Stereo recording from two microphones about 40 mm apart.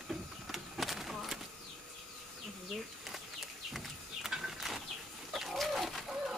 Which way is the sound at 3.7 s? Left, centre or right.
Centre.